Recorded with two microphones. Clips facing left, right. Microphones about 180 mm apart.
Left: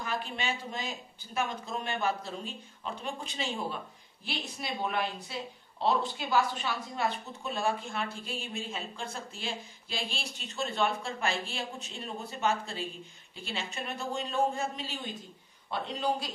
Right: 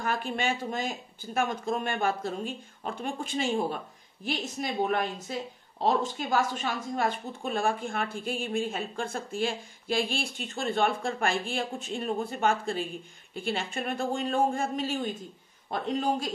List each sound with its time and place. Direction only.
0.0 s a woman's voice: 50° right (ahead or behind)